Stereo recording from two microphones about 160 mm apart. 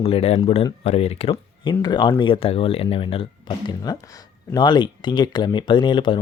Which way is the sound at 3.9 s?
25° left (ahead or behind).